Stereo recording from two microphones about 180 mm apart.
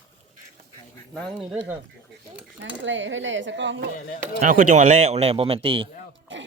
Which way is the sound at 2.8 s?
90° right.